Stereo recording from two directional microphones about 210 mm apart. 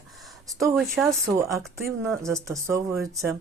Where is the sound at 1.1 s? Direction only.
15° right (ahead or behind).